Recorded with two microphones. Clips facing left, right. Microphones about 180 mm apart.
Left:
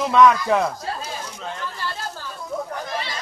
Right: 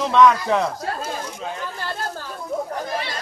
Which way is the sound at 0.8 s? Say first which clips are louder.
Right 3 dB; 50° right (ahead or behind).